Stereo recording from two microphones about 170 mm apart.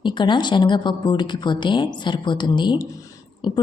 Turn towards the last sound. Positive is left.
turn(degrees=25)  # may be behind; listen again after turning